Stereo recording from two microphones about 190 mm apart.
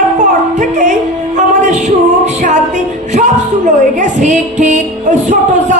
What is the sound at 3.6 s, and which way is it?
A woman's voice, 40° right (ahead or behind).